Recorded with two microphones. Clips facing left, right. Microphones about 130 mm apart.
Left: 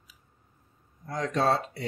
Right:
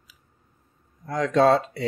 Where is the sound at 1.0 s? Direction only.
90° right.